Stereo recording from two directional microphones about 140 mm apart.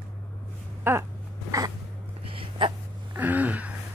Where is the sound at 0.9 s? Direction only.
15° right (ahead or behind).